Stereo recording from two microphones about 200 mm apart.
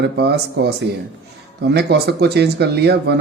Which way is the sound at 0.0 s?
55° right (ahead or behind).